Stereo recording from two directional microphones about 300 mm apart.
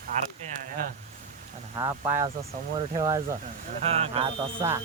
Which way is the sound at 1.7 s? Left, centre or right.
Centre.